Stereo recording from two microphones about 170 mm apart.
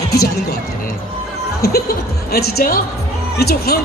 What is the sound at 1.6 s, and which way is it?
A woman's voice, 65° left (ahead or behind).